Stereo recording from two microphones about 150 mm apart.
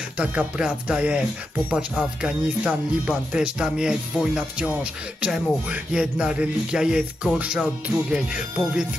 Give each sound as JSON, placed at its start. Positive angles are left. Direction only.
{"t": 0.2, "sound": "a man's voice", "side_deg": -10}